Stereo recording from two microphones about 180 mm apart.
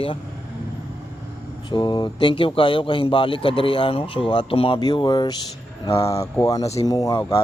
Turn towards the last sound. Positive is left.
turn(degrees=20)  # may be behind; listen again after turning